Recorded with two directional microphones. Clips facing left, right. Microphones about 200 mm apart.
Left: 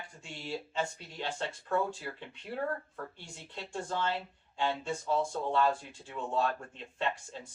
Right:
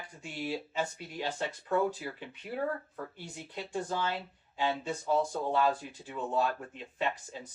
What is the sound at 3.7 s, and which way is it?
Speech, 15° right (ahead or behind).